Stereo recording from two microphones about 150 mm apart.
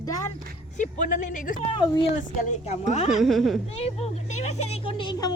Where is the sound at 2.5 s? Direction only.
50° left (ahead or behind).